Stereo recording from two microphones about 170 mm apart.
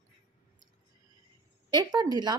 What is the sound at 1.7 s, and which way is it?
Speech, 25° right (ahead or behind).